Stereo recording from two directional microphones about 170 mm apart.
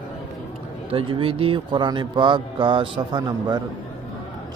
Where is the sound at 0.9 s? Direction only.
30° right (ahead or behind).